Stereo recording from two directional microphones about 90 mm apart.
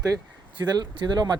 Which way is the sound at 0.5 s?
50° right (ahead or behind).